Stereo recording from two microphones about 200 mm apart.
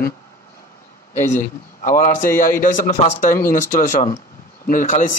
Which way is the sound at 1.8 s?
40° left (ahead or behind).